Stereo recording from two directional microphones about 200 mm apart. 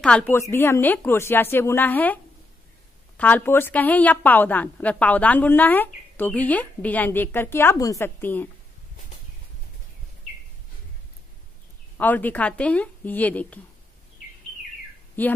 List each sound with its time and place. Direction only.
0.0 s a woman's voice: 5° left (ahead or behind)
3.2 s a woman's voice: 10° left (ahead or behind)
12.0 s a woman's voice: 10° left (ahead or behind)
15.2 s a woman's voice: 10° left (ahead or behind)